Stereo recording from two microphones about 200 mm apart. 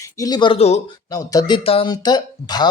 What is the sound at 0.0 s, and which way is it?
Speech, 20° left (ahead or behind).